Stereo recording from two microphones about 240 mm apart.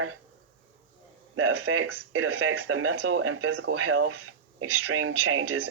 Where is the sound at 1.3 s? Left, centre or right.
Right.